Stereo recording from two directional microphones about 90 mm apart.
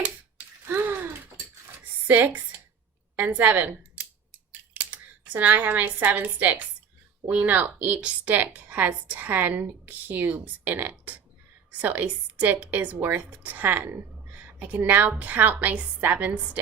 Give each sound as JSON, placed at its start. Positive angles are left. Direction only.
{"t": 0.7, "sound": "gasp", "side_deg": -20}
{"t": 2.0, "sound": "a woman's voice", "side_deg": -20}